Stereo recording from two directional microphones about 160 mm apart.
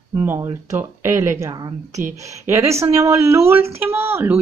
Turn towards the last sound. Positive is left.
turn(degrees=-15)  # may be behind; listen again after turning